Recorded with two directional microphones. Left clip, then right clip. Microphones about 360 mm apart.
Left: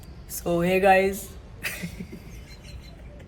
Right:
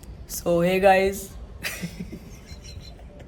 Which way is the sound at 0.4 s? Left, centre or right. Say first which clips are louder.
Right 2 dB; centre.